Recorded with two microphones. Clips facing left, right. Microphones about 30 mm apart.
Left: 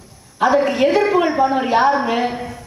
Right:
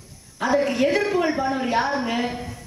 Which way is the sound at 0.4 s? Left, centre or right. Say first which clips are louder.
Left 6 dB; left.